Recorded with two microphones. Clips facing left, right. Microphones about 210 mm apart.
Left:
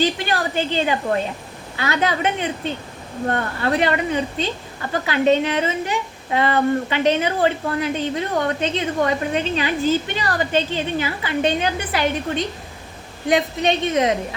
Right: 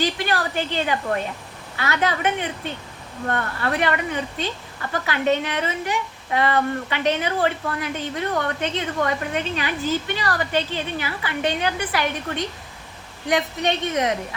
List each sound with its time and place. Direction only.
0.0 s a woman's voice: 20° left (ahead or behind)